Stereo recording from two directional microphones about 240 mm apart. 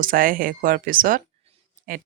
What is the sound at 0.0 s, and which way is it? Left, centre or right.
Speech, right.